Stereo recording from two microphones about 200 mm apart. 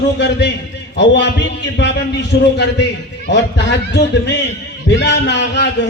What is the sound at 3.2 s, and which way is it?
A man's voice, 60° left (ahead or behind).